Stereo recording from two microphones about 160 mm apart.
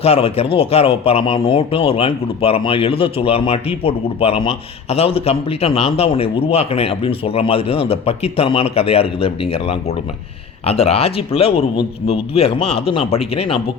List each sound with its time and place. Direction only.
0.0 s a man's voice: 40° left (ahead or behind)